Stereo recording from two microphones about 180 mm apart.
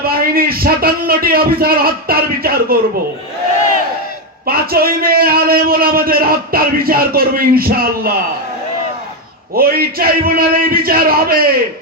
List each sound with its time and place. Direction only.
0.0 s a sound: 55° right (ahead or behind)
4.4 s a man's voice: 55° right (ahead or behind)
9.6 s a man's voice: 55° right (ahead or behind)